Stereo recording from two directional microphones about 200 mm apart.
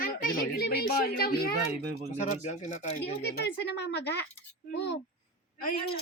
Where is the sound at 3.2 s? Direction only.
60° left (ahead or behind).